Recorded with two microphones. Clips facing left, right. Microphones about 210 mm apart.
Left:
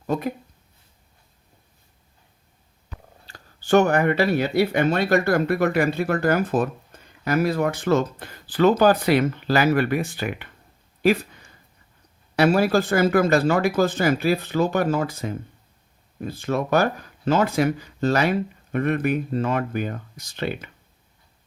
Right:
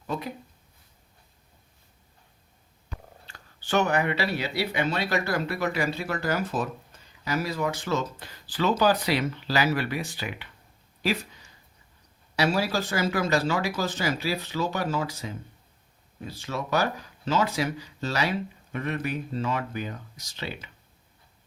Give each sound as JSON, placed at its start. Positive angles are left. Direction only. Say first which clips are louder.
{"t": 0.1, "sound": "speech", "louder": "left 7 dB", "side_deg": 50}
{"t": 3.2, "sound": "speech", "louder": "left 11 dB", "side_deg": 40}
{"t": 11.0, "sound": "a sound", "louder": "left 9 dB", "side_deg": 55}
{"t": 12.4, "sound": "speech", "louder": "left 7 dB", "side_deg": 55}